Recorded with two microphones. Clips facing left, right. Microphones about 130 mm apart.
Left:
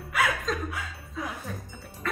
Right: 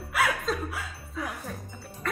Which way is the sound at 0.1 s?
5° right (ahead or behind).